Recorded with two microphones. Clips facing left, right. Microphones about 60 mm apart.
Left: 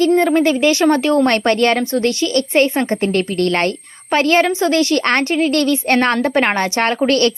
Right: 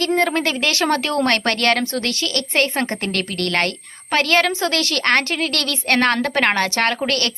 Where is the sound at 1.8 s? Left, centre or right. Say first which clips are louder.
Left 6 dB; centre.